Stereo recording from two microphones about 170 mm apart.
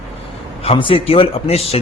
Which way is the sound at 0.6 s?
35° left (ahead or behind).